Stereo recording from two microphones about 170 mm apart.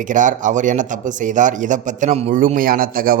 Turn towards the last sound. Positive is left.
turn(degrees=-55)  # may be behind; listen again after turning